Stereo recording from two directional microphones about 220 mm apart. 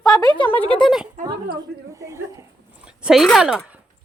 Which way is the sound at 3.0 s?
Centre (ahead or behind).